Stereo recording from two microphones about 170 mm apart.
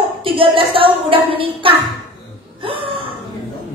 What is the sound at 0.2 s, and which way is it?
Speech, 30° right (ahead or behind).